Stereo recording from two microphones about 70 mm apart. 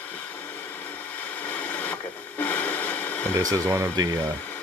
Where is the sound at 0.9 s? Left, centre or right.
Left.